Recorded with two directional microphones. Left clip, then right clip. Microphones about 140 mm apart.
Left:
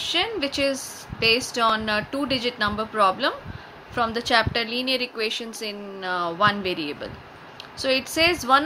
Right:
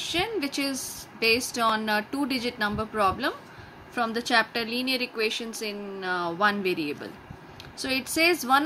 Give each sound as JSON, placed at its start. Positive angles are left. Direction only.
{"t": 0.0, "sound": "a woman's voice", "side_deg": -15}